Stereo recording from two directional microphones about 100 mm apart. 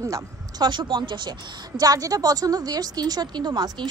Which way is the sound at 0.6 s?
50° right (ahead or behind).